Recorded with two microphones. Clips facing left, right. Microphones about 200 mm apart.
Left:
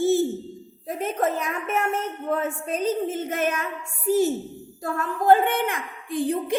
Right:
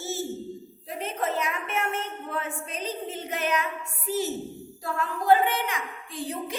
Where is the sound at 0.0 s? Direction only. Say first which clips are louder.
Left 11 dB; 55° left (ahead or behind).